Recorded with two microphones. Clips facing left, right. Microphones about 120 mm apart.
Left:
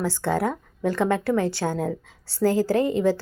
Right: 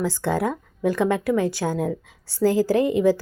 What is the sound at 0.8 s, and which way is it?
A woman's voice, 15° right (ahead or behind).